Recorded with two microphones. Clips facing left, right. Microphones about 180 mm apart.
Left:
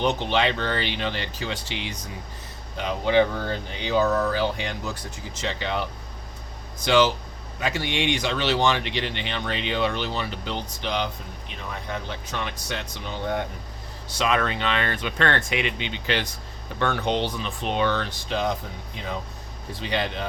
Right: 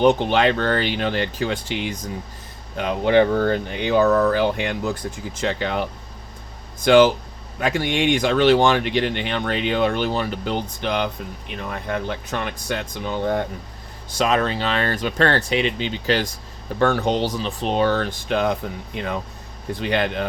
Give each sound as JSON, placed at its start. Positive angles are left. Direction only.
{"t": 0.0, "sound": "speech", "side_deg": -50}
{"t": 6.8, "sound": "speech", "side_deg": -55}
{"t": 14.2, "sound": "speech", "side_deg": -35}
{"t": 18.3, "sound": "speech", "side_deg": -60}
{"t": 19.8, "sound": "speech", "side_deg": -55}